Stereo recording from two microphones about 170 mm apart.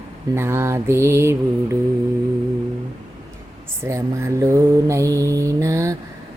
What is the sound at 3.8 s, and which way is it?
Mantra, 15° right (ahead or behind).